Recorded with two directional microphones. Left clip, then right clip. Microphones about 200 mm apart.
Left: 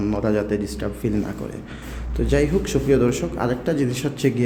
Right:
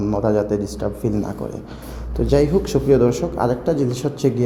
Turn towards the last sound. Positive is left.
turn(degrees=5)  # may be behind; listen again after turning